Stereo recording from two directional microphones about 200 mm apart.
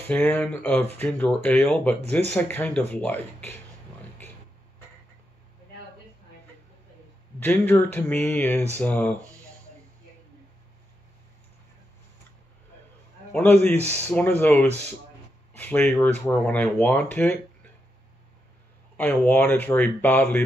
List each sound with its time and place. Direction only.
0.1 s speech: 5° left (ahead or behind)
7.4 s speech: 10° left (ahead or behind)
13.3 s a man's voice: 10° left (ahead or behind)
13.7 s speech: 35° right (ahead or behind)
14.4 s speech: 10° left (ahead or behind)
18.9 s speech: 10° left (ahead or behind)